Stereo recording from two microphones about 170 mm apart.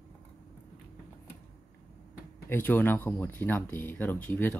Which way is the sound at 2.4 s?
10° left (ahead or behind).